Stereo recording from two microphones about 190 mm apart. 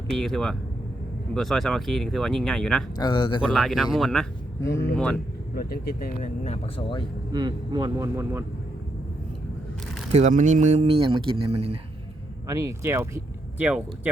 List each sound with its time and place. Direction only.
0.1 s speech: centre (ahead or behind)
3.0 s speech: 25° left (ahead or behind)
3.5 s speech: centre (ahead or behind)
4.6 s speech: 15° left (ahead or behind)
5.5 s speech: 50° left (ahead or behind); by 7.0 s 25° left (ahead or behind)
7.3 s speech: 20° right (ahead or behind)
10.1 s speech: 35° right (ahead or behind)
12.5 s speech: 15° right (ahead or behind)